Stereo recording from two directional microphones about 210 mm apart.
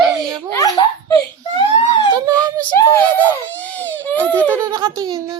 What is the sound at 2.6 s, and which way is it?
Crying, 10° left (ahead or behind).